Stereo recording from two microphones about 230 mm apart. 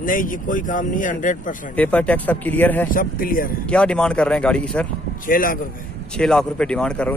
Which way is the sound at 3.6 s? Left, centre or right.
Centre.